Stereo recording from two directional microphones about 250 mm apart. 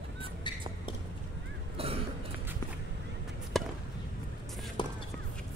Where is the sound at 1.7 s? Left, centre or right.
Right.